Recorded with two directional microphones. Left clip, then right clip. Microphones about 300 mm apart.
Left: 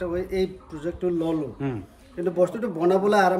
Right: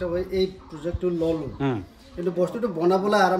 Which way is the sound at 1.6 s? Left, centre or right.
Centre.